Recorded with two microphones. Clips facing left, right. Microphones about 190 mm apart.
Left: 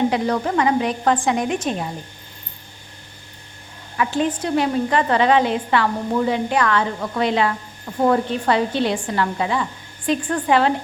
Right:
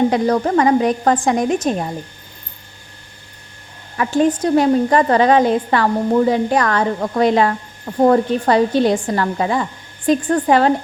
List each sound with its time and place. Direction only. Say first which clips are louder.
0.1 s a woman's voice: right 5 dB; 40° right (ahead or behind)
3.9 s a woman's voice: right 5 dB; 45° right (ahead or behind)